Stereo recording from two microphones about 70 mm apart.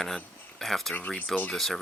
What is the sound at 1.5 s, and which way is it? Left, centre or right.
Speech, centre.